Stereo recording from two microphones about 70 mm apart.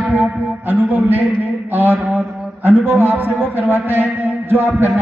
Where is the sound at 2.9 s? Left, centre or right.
Right.